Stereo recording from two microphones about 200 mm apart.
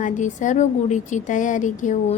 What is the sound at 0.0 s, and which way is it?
A woman's voice, 40° left (ahead or behind).